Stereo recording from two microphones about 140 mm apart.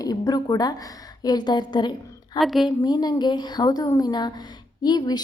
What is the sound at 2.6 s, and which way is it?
A woman's voice, 30° left (ahead or behind).